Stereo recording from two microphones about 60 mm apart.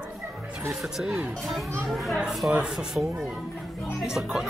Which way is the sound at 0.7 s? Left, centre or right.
Centre.